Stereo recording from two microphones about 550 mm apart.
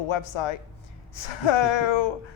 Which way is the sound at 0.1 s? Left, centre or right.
Left.